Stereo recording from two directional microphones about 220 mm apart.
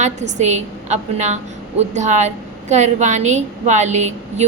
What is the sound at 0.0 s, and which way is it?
A woman's voice, 30° right (ahead or behind).